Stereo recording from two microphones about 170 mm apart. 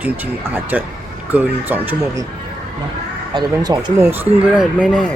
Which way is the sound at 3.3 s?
25° right (ahead or behind).